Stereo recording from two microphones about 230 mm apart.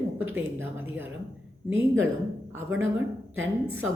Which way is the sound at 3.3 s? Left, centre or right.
Right.